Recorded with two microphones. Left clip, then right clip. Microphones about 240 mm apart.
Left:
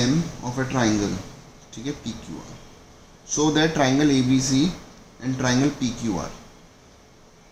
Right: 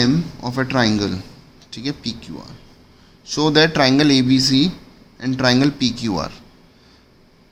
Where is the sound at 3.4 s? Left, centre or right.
Right.